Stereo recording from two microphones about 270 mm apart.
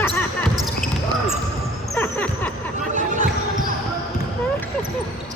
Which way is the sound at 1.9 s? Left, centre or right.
Centre.